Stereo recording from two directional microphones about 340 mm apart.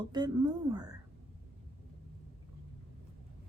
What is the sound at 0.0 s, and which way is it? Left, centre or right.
Speech, centre.